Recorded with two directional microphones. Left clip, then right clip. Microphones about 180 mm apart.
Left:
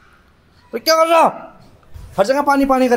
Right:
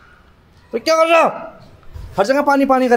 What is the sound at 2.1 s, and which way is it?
Speech, 20° right (ahead or behind).